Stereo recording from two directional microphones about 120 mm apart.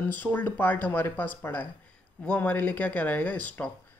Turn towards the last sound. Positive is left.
turn(degrees=10)  # may be behind; listen again after turning